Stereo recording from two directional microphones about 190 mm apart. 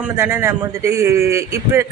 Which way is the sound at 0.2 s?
10° right (ahead or behind).